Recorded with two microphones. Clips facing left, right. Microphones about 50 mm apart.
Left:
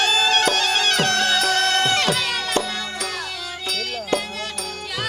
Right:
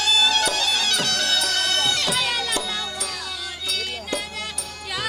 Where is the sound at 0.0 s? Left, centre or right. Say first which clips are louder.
Left 2 dB; left.